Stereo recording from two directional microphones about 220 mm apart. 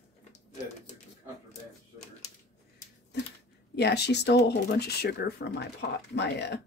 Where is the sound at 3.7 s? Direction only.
50° left (ahead or behind).